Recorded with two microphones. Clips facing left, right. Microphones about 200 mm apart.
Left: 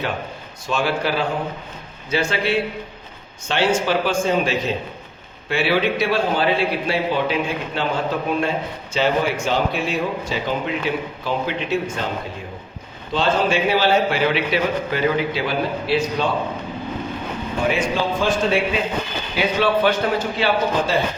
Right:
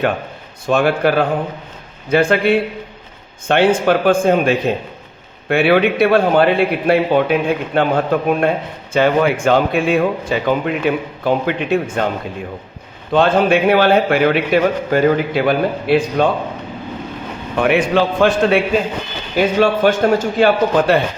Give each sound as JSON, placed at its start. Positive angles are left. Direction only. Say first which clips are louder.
{"t": 0.7, "sound": "a man's voice", "louder": "right 7 dB", "side_deg": -55}
{"t": 13.1, "sound": "a man's voice", "louder": "right 6 dB", "side_deg": -55}
{"t": 17.6, "sound": "a man's voice", "louder": "right 7 dB", "side_deg": -65}
{"t": 19.4, "sound": "speech", "louder": "right 5 dB", "side_deg": -45}